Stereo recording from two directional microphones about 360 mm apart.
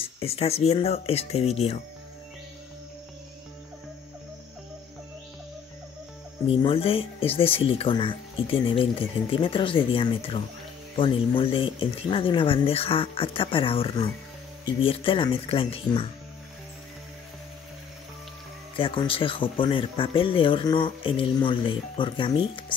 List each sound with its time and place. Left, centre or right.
0.0 s speech: centre
6.5 s speech: centre
18.8 s speech: centre